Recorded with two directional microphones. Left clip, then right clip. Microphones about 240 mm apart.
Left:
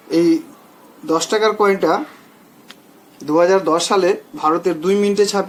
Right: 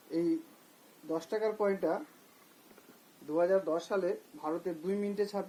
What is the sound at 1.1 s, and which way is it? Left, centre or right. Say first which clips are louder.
Speech: left 17 dB; centre.